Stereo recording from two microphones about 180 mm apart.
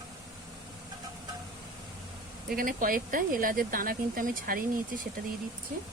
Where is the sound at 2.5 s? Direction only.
50° right (ahead or behind).